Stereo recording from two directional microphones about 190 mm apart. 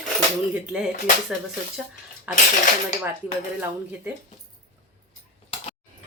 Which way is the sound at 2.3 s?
10° right (ahead or behind).